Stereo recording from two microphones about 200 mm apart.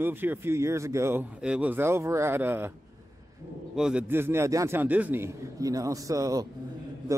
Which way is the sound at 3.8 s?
5° right (ahead or behind).